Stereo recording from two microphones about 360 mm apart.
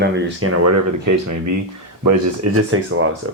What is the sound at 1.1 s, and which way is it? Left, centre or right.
Speech, right.